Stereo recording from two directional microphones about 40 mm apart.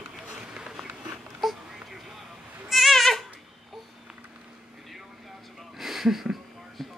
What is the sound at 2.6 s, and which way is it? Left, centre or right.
Goat, centre.